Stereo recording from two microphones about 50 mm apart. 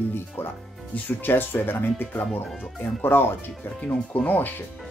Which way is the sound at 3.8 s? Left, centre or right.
Left.